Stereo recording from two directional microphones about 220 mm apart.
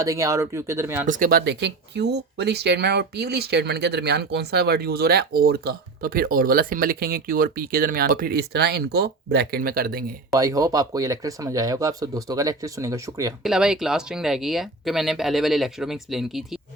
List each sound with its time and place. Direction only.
0.0 s speech: 15° right (ahead or behind)
1.0 s speech: 35° right (ahead or behind)
10.3 s speech: 15° right (ahead or behind)
13.4 s speech: 5° right (ahead or behind)